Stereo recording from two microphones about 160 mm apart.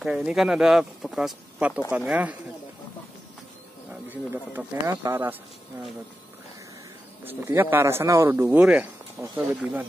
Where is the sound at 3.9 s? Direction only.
10° right (ahead or behind).